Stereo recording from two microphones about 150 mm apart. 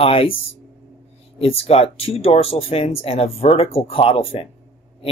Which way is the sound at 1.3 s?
40° left (ahead or behind).